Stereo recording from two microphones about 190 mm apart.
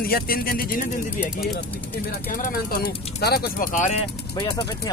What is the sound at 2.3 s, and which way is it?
Speech, 45° left (ahead or behind).